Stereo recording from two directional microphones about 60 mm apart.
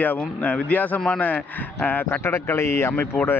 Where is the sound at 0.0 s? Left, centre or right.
Left.